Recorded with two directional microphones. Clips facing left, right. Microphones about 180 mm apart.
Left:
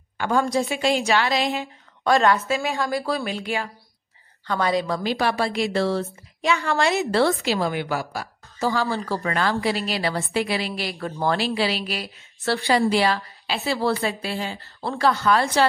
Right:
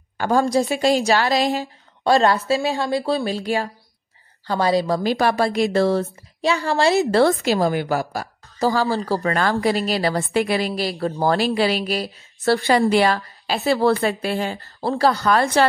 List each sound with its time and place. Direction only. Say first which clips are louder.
0.2 s a woman's voice: right 3 dB; 40° right (ahead or behind)
11.4 s a woman's voice: right 4 dB; 50° right (ahead or behind)
14.8 s a woman's voice: right 3 dB; 35° right (ahead or behind)